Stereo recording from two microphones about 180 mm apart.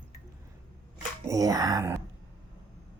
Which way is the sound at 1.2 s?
20° right (ahead or behind).